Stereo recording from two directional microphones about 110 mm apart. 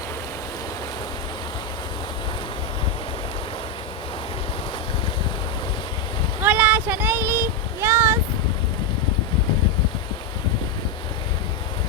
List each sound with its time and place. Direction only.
6.4 s child singing: 15° right (ahead or behind)